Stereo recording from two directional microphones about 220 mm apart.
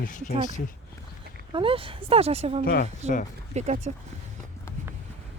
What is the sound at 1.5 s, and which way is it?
Speech, 25° right (ahead or behind).